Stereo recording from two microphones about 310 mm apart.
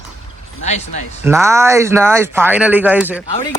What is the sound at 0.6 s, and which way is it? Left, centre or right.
Speech, left.